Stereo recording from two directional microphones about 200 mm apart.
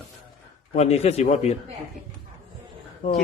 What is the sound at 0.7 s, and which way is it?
Speech, 35° left (ahead or behind).